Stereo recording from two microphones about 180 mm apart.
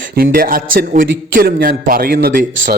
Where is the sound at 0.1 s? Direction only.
55° right (ahead or behind).